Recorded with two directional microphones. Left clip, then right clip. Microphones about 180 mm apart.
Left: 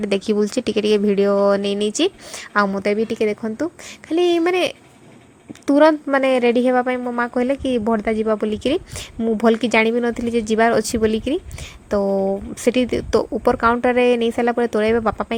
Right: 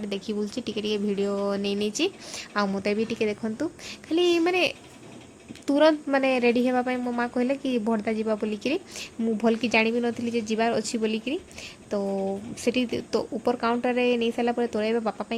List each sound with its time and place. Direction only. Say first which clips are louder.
0.0 s a woman's voice: left 12 dB; 40° left (ahead or behind)